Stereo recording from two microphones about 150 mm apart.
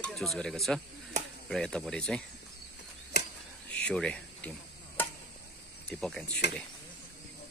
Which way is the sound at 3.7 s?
5° left (ahead or behind).